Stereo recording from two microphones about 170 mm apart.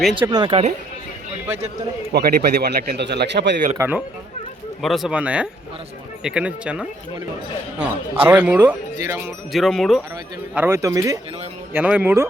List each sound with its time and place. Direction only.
0.2 s speech: 25° right (ahead or behind)
2.1 s speech: 65° right (ahead or behind); by 3.6 s 90° right
3.8 s speech: 10° right (ahead or behind)
4.8 s speech: centre (ahead or behind)
9.5 s speech: centre (ahead or behind)
10.5 s speech: 10° right (ahead or behind)